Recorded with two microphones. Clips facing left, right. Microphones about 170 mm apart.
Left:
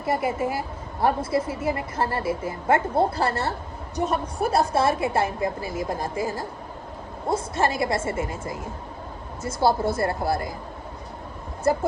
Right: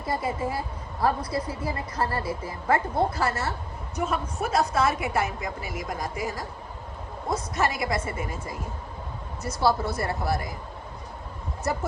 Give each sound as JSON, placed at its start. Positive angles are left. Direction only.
{"t": 0.4, "sound": "a woman's voice", "side_deg": 25}
{"t": 11.6, "sound": "speech", "side_deg": 30}